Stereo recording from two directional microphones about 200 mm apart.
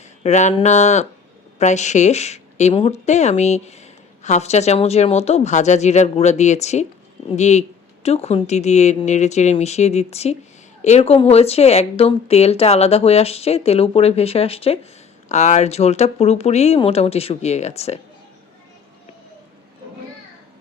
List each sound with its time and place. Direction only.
0.0 s speech: 35° left (ahead or behind)